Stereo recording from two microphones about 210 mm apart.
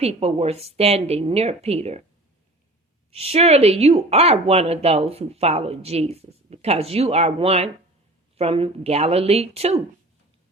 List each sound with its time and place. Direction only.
0.0 s speech: 30° right (ahead or behind)
3.1 s speech: 30° right (ahead or behind)